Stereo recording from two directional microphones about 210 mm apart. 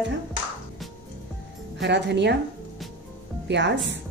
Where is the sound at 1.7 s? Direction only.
55° right (ahead or behind).